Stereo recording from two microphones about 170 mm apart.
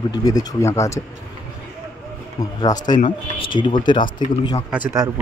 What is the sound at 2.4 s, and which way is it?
Speech, 25° left (ahead or behind).